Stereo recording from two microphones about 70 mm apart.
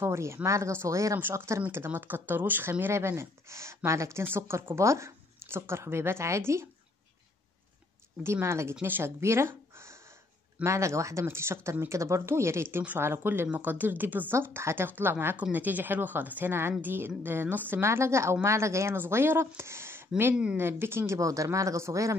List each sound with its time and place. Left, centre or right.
0.0 s speech: right
1.1 s speech: right
1.9 s speech: right
8.2 s a woman's voice: right
9.2 s a sound: right
10.6 s a woman's voice: right
21.2 s speech: right